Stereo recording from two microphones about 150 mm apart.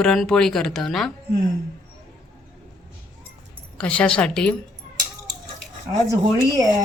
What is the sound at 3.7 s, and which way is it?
Speech, 10° left (ahead or behind).